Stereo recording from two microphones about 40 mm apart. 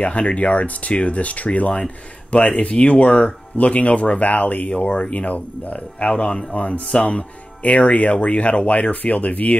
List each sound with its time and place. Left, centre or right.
0.0 s speech: left
6.0 s speech: left
6.5 s speech: left